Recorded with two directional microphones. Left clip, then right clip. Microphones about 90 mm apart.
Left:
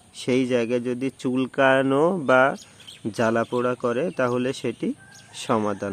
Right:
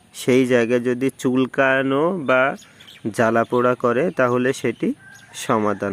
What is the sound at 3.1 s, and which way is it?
Speech, 45° right (ahead or behind).